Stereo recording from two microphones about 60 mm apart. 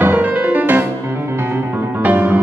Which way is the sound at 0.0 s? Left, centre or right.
Right.